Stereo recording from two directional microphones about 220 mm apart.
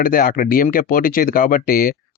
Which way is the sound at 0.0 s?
40° left (ahead or behind).